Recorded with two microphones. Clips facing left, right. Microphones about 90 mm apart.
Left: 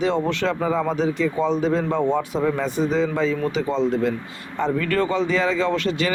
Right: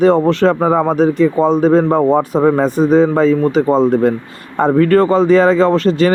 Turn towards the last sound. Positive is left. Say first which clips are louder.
# right 10 dB
turn(degrees=-40)  # may be behind; listen again after turning